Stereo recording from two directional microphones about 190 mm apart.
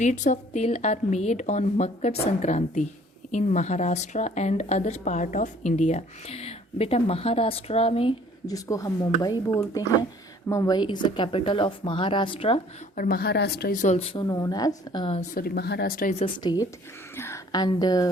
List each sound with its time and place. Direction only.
0.0 s a woman's voice: 40° left (ahead or behind)
13.0 s speech: 55° left (ahead or behind); by 15.3 s 30° left (ahead or behind)
15.4 s speech: 55° left (ahead or behind)
16.1 s a woman's voice: 25° left (ahead or behind)